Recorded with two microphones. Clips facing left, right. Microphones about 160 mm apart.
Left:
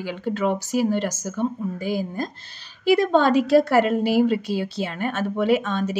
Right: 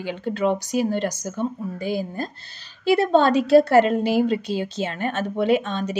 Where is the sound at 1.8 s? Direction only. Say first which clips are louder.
Right 1 dB; 15° left (ahead or behind).